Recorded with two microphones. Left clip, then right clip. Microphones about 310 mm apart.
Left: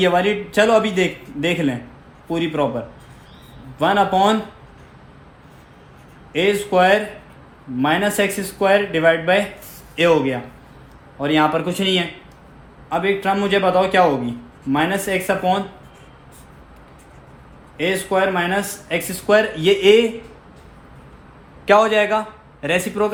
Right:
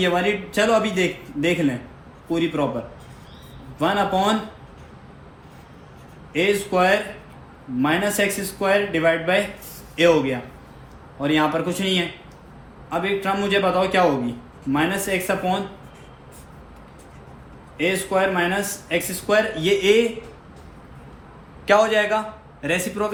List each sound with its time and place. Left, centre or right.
0.0 s a man's voice: left
3.8 s speech: left
6.3 s a man's voice: left
17.7 s speech: left
21.7 s speech: left